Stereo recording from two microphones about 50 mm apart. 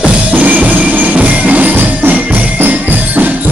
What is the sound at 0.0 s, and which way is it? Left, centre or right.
Music, right.